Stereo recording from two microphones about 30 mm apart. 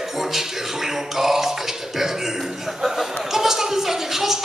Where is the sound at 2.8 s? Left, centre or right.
Centre.